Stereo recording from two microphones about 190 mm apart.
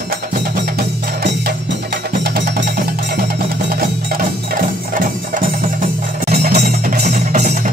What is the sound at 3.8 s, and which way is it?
Music, 45° right (ahead or behind).